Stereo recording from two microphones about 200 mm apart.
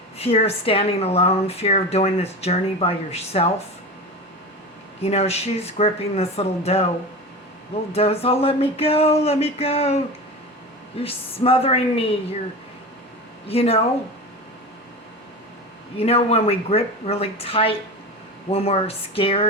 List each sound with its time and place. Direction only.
0.2 s speech: 30° left (ahead or behind)
5.0 s speech: 30° left (ahead or behind)
7.9 s a woman's voice: 30° left (ahead or behind)
13.5 s a woman's voice: 30° left (ahead or behind)
16.0 s a woman's voice: 30° left (ahead or behind)